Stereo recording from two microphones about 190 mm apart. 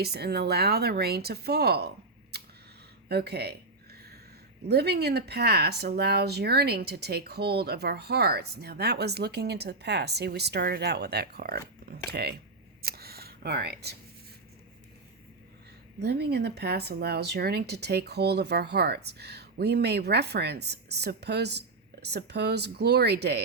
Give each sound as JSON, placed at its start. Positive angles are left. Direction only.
{"t": 0.0, "sound": "speech", "side_deg": -55}
{"t": 2.3, "sound": "camera", "side_deg": -60}
{"t": 3.1, "sound": "speech", "side_deg": -60}
{"t": 3.9, "sound": "a sound", "side_deg": -55}
{"t": 4.7, "sound": "speech", "side_deg": -60}
{"t": 12.8, "sound": "a sound", "side_deg": -55}
{"t": 16.0, "sound": "speech", "side_deg": -60}